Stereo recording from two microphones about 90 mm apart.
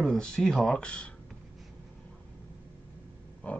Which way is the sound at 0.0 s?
5° left (ahead or behind).